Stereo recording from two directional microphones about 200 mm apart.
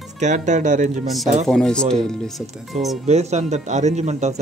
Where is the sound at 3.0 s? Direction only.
35° right (ahead or behind).